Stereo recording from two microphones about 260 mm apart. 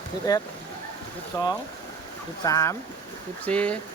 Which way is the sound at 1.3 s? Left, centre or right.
Centre.